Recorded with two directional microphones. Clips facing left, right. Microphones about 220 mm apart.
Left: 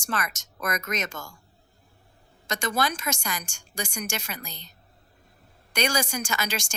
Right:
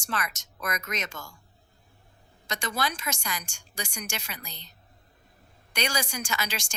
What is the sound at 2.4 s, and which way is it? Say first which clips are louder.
A woman's voice: left 4 dB; 45° left (ahead or behind).